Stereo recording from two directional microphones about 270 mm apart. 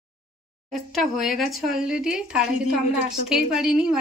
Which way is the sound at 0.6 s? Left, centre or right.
Centre.